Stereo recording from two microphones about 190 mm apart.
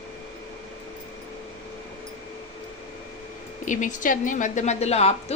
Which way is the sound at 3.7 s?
40° left (ahead or behind).